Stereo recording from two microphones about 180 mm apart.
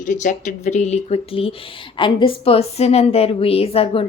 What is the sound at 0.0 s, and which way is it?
A woman's voice, 45° left (ahead or behind).